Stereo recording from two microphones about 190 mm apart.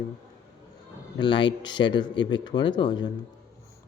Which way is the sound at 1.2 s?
25° left (ahead or behind).